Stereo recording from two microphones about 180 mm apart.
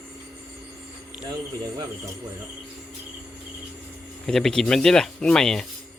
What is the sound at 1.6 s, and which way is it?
Speech, 20° right (ahead or behind).